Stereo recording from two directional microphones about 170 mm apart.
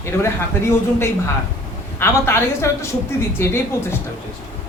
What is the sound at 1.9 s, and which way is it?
Speech, 15° left (ahead or behind).